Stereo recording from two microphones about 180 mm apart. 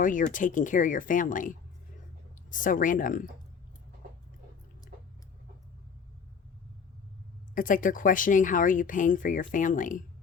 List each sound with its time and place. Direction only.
0.0 s speech: 50° left (ahead or behind)
7.5 s speech: 50° left (ahead or behind)